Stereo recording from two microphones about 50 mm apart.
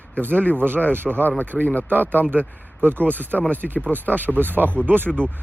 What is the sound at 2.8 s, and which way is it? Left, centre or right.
Speech, right.